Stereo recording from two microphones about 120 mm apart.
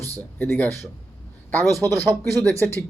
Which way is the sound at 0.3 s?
15° left (ahead or behind).